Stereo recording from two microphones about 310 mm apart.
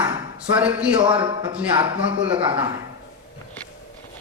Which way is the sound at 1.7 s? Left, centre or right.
Centre.